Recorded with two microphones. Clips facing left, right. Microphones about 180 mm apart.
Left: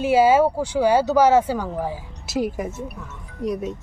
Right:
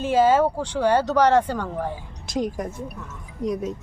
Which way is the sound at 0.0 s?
10° left (ahead or behind).